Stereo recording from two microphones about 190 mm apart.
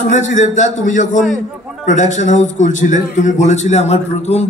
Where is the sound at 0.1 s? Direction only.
40° left (ahead or behind).